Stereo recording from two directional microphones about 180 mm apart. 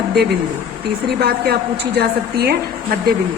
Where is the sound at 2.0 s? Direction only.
60° right (ahead or behind).